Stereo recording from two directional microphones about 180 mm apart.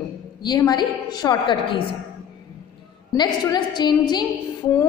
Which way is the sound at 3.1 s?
20° left (ahead or behind).